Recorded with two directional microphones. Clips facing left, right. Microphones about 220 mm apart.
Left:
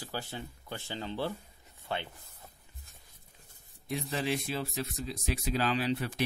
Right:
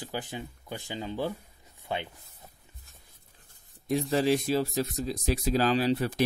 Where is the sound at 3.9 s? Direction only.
40° right (ahead or behind).